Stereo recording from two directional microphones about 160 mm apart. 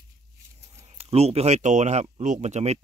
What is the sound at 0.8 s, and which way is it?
Speech, 40° right (ahead or behind).